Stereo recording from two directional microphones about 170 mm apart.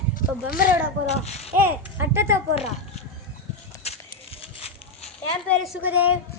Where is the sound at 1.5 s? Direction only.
10° right (ahead or behind).